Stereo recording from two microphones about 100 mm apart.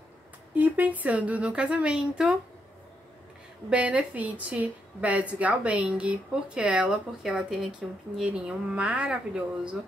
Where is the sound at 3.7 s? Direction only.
15° right (ahead or behind).